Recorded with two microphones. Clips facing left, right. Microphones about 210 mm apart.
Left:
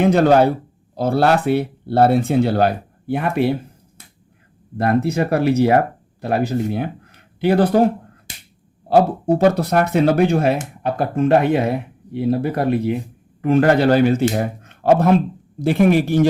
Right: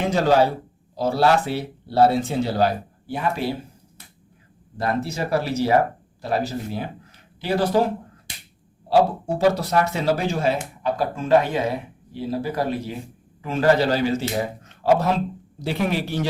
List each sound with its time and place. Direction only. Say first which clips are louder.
0.0 s speech: left 5 dB; 55° left (ahead or behind)
4.8 s speech: left 7 dB; 60° left (ahead or behind)
9.0 s speech: left 4 dB; 55° left (ahead or behind)